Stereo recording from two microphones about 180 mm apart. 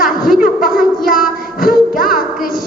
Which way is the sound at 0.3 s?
50° left (ahead or behind).